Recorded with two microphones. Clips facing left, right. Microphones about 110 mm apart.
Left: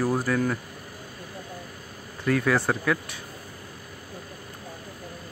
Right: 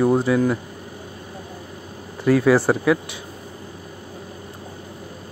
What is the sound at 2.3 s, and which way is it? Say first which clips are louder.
Speech: right 7 dB; 25° right (ahead or behind).